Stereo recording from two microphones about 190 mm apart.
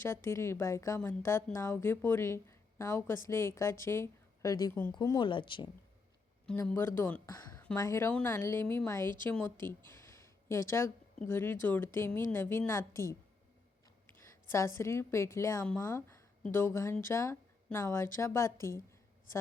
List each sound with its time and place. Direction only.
0.0 s a woman's voice: 15° left (ahead or behind)
6.7 s a woman's voice: 10° left (ahead or behind)
10.0 s a sound: 15° left (ahead or behind)
11.3 s a woman's voice: 10° left (ahead or behind)